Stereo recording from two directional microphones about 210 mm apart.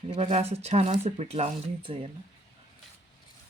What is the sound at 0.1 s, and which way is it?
Speech, 30° right (ahead or behind).